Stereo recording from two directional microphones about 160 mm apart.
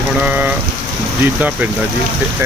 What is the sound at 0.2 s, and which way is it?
Speech, 10° right (ahead or behind).